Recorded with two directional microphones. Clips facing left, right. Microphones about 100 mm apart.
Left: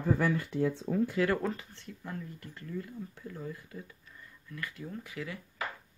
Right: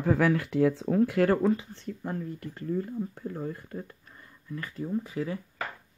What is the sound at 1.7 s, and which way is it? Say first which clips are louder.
Speech: right 7 dB; 40° right (ahead or behind).